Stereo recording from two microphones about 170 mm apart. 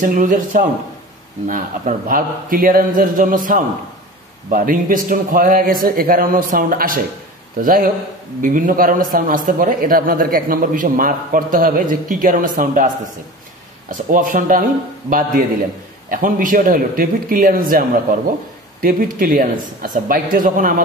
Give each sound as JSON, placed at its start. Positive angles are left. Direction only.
{"t": 0.0, "sound": "a man's voice", "side_deg": -50}